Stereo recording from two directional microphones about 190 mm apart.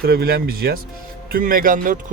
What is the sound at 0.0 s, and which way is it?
Speech, 50° right (ahead or behind).